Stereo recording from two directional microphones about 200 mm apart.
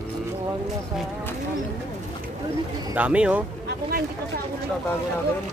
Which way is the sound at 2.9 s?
5° right (ahead or behind).